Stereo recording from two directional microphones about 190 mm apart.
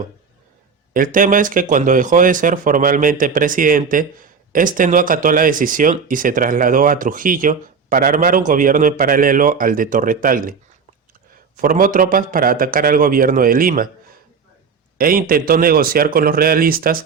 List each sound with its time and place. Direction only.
0.9 s speech: 45° right (ahead or behind)
11.5 s speech: 45° right (ahead or behind)
14.9 s speech: 50° right (ahead or behind)